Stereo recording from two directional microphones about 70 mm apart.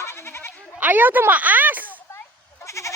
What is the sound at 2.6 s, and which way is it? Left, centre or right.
Goat, left.